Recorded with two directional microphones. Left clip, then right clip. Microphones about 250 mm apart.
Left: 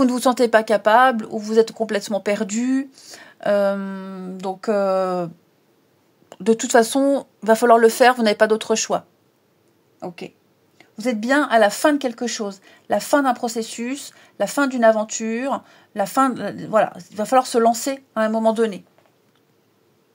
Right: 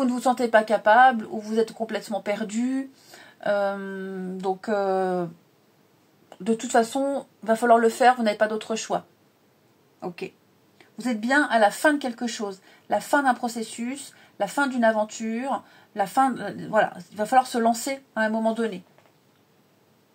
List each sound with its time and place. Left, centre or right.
0.0 s speech: left
11.0 s speech: left